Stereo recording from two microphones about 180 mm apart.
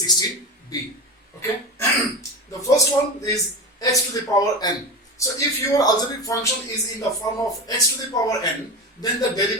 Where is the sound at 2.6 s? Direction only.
20° left (ahead or behind).